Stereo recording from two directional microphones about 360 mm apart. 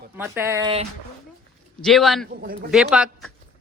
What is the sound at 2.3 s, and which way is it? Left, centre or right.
Speech, right.